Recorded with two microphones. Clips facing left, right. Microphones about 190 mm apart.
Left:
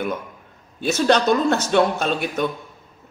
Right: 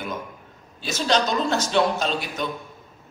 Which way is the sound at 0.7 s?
60° left (ahead or behind).